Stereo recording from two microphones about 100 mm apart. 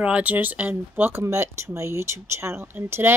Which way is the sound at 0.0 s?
15° right (ahead or behind).